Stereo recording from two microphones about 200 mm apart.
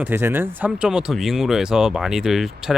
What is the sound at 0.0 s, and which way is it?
Speech, 10° right (ahead or behind).